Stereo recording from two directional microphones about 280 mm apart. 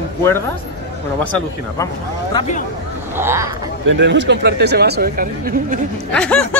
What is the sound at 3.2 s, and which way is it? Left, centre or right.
Speech, centre.